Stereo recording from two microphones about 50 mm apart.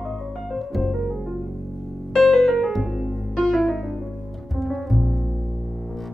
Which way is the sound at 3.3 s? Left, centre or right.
Centre.